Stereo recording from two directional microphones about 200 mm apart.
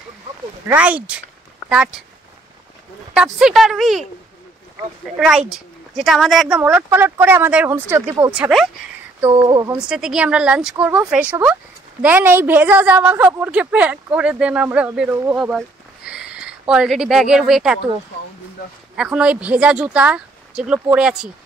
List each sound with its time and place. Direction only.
0.7 s a woman's voice: 5° right (ahead or behind)
3.2 s speech: 5° right (ahead or behind)
5.1 s a woman's voice: 5° right (ahead or behind)
9.4 s speech: 20° right (ahead or behind)
9.7 s a woman's voice: 5° right (ahead or behind)
18.9 s speech: 5° right (ahead or behind)